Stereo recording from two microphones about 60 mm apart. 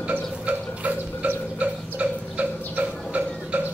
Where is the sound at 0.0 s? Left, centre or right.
Right.